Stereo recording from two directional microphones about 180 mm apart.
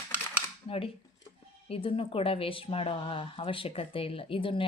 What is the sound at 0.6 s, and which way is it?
Speech, 35° left (ahead or behind).